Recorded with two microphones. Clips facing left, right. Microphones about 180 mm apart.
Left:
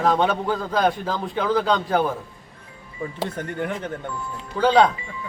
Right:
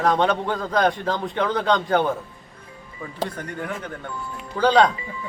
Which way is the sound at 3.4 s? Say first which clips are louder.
Left 3 dB; 25° left (ahead or behind).